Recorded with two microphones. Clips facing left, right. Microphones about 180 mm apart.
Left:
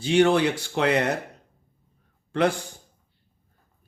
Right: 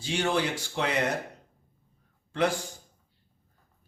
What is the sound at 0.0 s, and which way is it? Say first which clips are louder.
Speech: left 9 dB; 65° left (ahead or behind).